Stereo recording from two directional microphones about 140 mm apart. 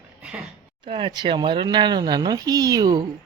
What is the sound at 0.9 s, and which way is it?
Speech, 35° right (ahead or behind).